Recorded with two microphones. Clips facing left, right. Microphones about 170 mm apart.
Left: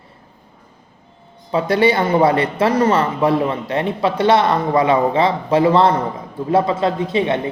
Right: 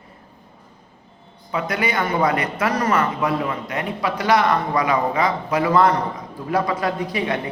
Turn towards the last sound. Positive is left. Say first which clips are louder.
# left 5 dB
turn(degrees=25)  # may be behind; listen again after turning